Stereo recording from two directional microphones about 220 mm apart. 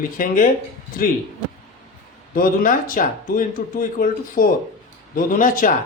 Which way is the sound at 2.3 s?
40° left (ahead or behind).